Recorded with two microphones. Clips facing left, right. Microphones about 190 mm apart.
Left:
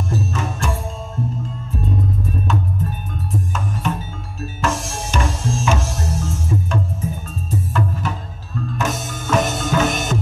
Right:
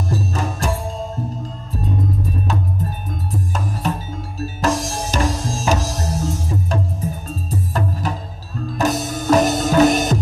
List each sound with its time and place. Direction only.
0.3 s music: 35° right (ahead or behind)
2.4 s music: 35° right (ahead or behind)